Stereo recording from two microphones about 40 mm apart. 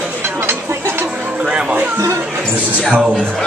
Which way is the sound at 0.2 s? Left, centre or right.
Right.